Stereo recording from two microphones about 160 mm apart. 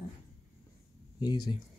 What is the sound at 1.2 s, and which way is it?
Speech, 25° left (ahead or behind).